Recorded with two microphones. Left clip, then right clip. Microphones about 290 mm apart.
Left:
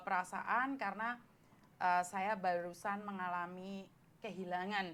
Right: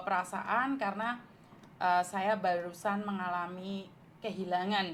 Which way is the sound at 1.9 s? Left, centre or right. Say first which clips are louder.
Right 6 dB; left.